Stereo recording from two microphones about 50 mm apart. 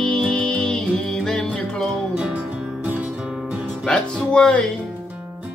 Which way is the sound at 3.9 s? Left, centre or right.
Centre.